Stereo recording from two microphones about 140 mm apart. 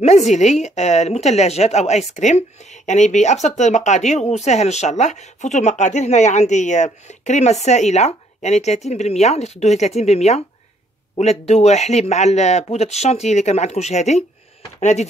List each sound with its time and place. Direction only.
0.0 s a woman's voice: 55° left (ahead or behind)